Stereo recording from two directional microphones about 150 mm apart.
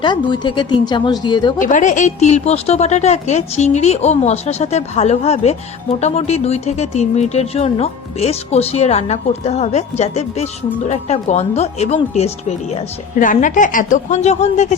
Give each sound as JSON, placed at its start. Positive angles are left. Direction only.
{"t": 0.0, "sound": "speech", "side_deg": 30}
{"t": 1.5, "sound": "speech", "side_deg": 55}
{"t": 13.1, "sound": "a woman's voice", "side_deg": 60}